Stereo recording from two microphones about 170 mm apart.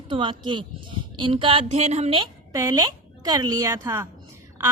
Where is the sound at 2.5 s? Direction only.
20° right (ahead or behind).